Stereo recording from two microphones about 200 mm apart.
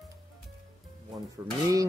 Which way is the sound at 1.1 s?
15° right (ahead or behind).